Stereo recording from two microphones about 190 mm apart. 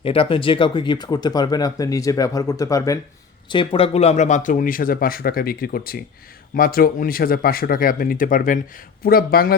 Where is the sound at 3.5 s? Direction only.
25° left (ahead or behind).